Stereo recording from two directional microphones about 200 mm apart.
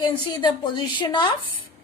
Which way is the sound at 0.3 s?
20° left (ahead or behind).